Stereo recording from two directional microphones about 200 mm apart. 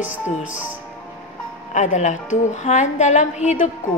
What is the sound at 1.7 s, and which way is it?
A woman's voice, 35° left (ahead or behind).